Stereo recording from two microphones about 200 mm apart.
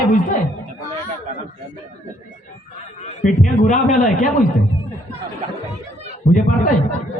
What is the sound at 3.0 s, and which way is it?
A man's voice, 35° left (ahead or behind).